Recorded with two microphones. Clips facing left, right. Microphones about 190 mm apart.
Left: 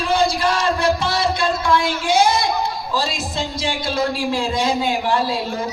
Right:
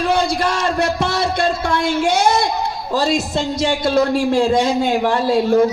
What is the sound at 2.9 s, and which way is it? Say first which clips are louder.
A man's voice: right 8 dB; 45° right (ahead or behind).